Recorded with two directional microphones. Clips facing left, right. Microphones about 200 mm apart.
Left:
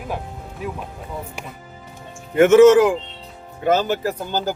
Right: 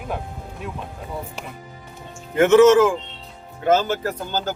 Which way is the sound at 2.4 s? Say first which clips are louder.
Left 2 dB; 15° left (ahead or behind).